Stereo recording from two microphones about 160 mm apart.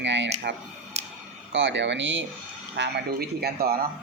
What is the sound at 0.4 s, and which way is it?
Speech, 90° right.